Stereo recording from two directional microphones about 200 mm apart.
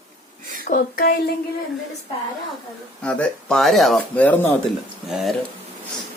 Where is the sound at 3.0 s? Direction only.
5° left (ahead or behind).